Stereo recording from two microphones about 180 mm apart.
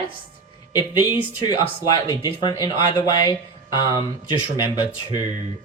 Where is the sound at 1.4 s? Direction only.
25° left (ahead or behind).